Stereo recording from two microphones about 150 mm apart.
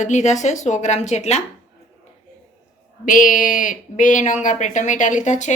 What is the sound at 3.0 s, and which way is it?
Speech, 60° left (ahead or behind).